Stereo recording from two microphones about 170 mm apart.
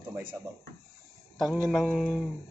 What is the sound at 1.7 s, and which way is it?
Speech, centre (ahead or behind).